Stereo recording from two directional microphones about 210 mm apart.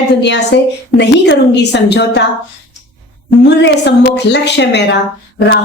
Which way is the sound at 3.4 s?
55° left (ahead or behind).